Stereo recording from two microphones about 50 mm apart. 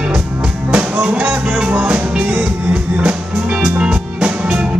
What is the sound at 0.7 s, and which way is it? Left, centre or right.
Music, right.